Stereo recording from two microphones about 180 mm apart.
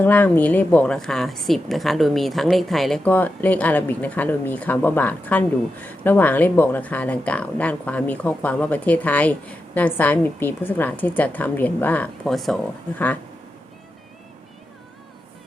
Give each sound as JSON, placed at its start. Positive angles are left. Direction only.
{"t": 0.0, "sound": "a woman's voice", "side_deg": 10}